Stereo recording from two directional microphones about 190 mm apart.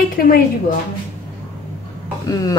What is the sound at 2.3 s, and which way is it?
Speech, 20° left (ahead or behind).